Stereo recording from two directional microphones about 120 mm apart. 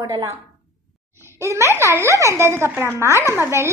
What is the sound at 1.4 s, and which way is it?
A woman's voice, 25° right (ahead or behind).